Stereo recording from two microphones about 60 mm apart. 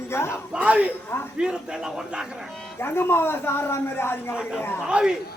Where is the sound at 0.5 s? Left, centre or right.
Right.